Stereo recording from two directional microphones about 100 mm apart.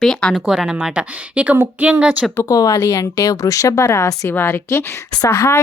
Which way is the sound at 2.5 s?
35° left (ahead or behind).